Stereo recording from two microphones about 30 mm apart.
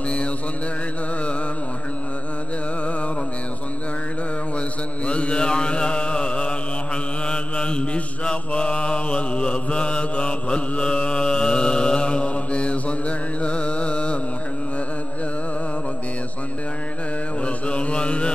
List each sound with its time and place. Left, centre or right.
5.0 s mantra: left
13.4 s music: left
17.5 s mantra: left